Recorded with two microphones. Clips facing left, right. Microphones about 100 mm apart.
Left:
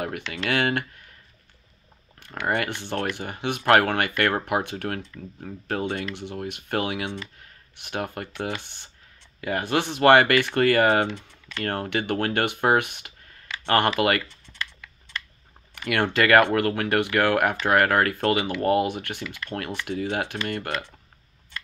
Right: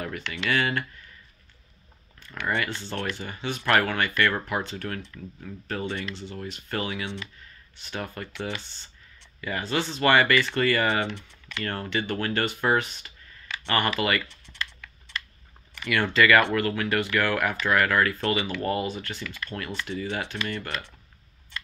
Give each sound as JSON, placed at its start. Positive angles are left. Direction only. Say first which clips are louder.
{"t": 0.3, "sound": "speech", "louder": "left 1 dB", "side_deg": 60}
{"t": 2.4, "sound": "speech", "louder": "left 2 dB", "side_deg": 60}
{"t": 15.7, "sound": "speech", "louder": "left 2 dB", "side_deg": 55}
{"t": 19.2, "sound": "speech", "louder": "left 2 dB", "side_deg": 15}
{"t": 19.5, "sound": "speech", "louder": "left 3 dB", "side_deg": 60}